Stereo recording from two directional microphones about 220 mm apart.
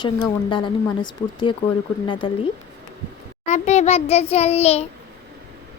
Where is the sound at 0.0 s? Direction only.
20° left (ahead or behind).